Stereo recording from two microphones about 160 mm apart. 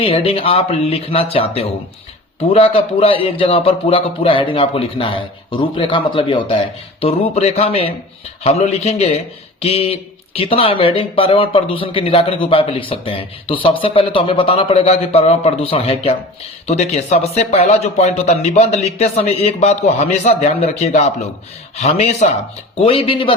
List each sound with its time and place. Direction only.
0.0 s a man's voice: 35° left (ahead or behind)